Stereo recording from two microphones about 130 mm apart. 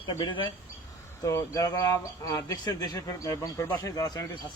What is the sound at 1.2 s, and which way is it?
Speech, 25° left (ahead or behind).